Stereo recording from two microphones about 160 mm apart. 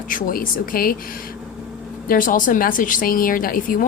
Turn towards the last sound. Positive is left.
turn(degrees=60)  # may be behind; listen again after turning